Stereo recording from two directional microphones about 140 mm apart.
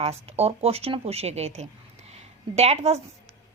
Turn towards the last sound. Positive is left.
turn(degrees=-50)  # may be behind; listen again after turning